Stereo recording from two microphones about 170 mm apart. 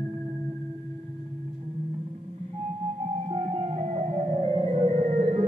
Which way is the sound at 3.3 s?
35° right (ahead or behind).